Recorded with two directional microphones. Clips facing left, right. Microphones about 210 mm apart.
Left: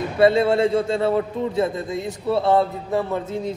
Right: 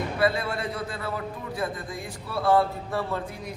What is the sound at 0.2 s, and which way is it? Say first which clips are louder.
A man's voice: left 11 dB; 25° left (ahead or behind).